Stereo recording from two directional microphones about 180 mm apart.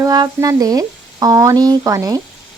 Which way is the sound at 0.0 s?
20° right (ahead or behind).